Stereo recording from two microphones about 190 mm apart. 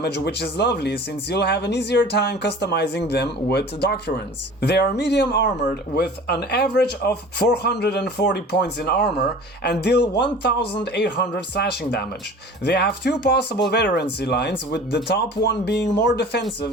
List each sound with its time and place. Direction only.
0.0 s speech: 60° left (ahead or behind)